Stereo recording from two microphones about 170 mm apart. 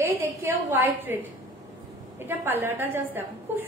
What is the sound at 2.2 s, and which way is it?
A woman's voice, 15° right (ahead or behind).